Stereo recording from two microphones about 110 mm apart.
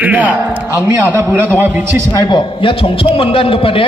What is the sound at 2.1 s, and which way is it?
A man's voice, 40° left (ahead or behind).